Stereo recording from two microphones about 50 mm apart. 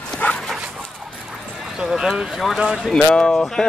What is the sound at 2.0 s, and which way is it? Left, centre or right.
Speech, centre.